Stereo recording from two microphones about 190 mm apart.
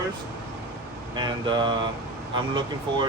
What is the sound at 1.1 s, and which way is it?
Speech, 25° right (ahead or behind).